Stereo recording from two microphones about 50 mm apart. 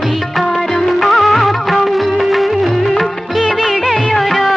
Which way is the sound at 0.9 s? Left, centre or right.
Centre.